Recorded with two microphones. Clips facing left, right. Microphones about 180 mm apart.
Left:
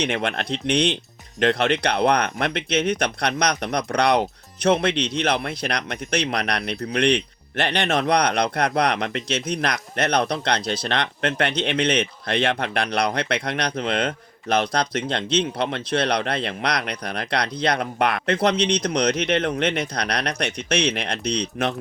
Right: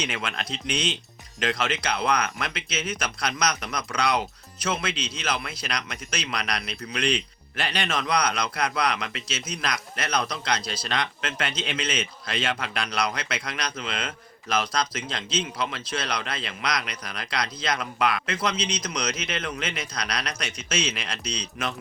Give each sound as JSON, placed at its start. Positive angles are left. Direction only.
{"t": 0.0, "sound": "speech", "side_deg": 60}